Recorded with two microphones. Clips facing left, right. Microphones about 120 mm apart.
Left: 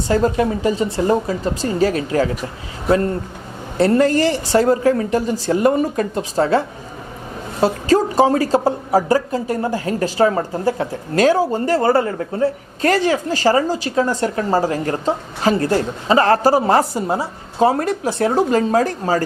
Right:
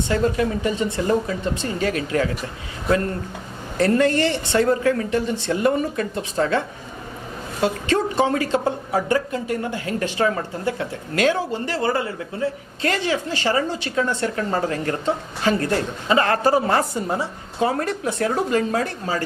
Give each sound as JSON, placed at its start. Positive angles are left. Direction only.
{"t": 0.1, "sound": "speech", "side_deg": 35}
{"t": 3.8, "sound": "speech", "side_deg": 30}